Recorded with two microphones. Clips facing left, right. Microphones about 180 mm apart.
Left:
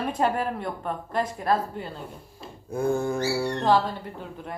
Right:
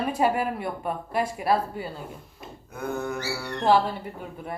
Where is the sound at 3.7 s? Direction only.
10° right (ahead or behind).